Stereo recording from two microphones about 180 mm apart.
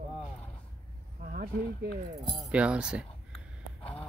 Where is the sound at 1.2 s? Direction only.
50° right (ahead or behind).